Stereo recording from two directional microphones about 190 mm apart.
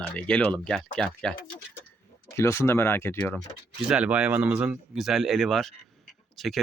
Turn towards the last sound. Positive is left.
turn(degrees=0)  # may be behind; listen again after turning